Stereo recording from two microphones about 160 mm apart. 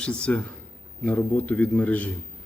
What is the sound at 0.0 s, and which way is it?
A man's voice, 5° left (ahead or behind).